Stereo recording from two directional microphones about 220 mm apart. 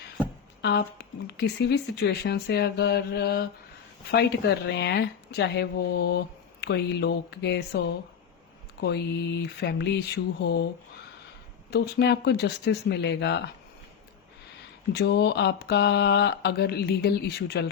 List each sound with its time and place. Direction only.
0.6 s speech: 50° left (ahead or behind)
11.7 s speech: 50° left (ahead or behind)
14.9 s speech: 50° left (ahead or behind)